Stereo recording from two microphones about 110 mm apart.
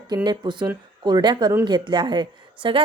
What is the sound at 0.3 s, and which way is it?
A woman's voice, 40° right (ahead or behind).